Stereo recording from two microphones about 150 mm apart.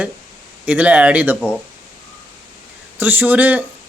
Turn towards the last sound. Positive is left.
turn(degrees=-10)  # may be behind; listen again after turning